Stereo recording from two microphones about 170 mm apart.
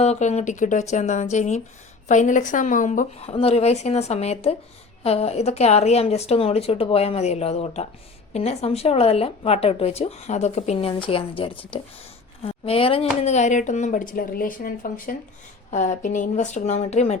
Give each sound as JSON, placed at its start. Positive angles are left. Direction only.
{"t": 0.0, "sound": "speech", "side_deg": 40}